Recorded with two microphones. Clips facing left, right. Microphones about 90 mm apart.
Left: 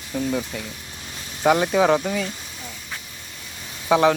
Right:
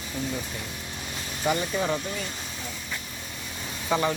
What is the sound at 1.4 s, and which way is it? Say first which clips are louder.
Speech: left 9 dB; 80° left.